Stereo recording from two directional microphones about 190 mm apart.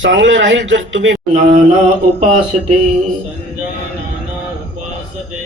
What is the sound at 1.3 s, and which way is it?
Speech, 35° right (ahead or behind).